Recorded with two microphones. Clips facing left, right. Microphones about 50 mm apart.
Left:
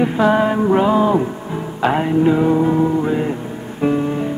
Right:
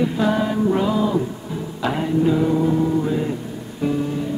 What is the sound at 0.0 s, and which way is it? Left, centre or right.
Music, left.